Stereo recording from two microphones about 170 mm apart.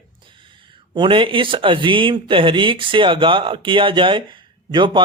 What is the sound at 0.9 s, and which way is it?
Speech, 30° right (ahead or behind).